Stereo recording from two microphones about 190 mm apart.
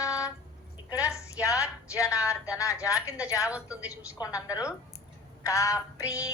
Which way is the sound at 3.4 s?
5° right (ahead or behind).